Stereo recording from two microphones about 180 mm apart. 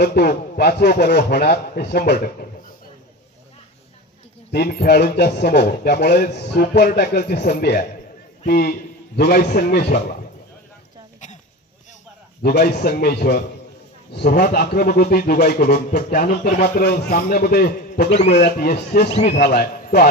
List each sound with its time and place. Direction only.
0.0 s a man's voice: 65° left (ahead or behind)
4.5 s a man's voice: 60° left (ahead or behind)
12.4 s a man's voice: 60° left (ahead or behind)